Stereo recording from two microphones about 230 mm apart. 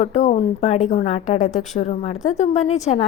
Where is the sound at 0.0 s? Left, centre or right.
Left.